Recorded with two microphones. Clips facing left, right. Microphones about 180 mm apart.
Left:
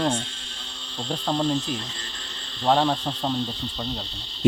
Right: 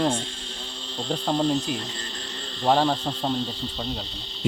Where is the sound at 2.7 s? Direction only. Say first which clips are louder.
Even; 5° right (ahead or behind).